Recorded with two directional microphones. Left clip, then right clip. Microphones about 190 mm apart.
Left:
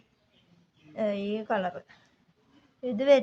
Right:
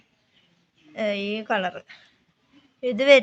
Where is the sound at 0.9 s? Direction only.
5° right (ahead or behind).